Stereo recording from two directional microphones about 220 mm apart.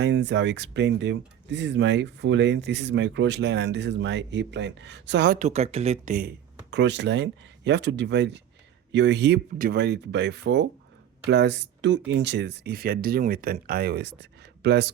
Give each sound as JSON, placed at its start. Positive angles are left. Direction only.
{"t": 0.0, "sound": "speech", "side_deg": -50}
{"t": 5.4, "sound": "speech", "side_deg": -30}
{"t": 6.7, "sound": "speech", "side_deg": -50}